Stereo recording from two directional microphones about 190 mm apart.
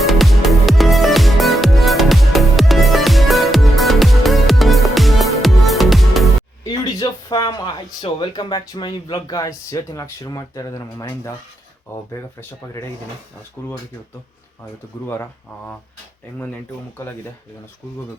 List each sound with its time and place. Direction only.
0.1 s music: centre (ahead or behind)
6.7 s speech: 20° left (ahead or behind)
13.6 s speech: 10° left (ahead or behind)
15.0 s speech: 10° left (ahead or behind)